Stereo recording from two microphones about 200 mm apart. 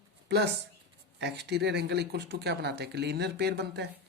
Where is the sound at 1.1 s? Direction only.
60° right (ahead or behind).